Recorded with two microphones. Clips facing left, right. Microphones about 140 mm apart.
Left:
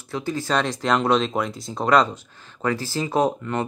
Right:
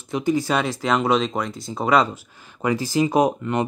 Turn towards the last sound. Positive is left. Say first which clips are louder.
# right 2 dB
turn(degrees=-15)  # may be behind; listen again after turning